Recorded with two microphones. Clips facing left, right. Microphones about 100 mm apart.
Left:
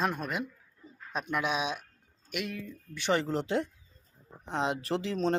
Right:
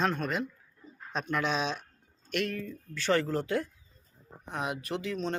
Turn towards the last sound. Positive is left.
turn(degrees=30)  # may be behind; listen again after turning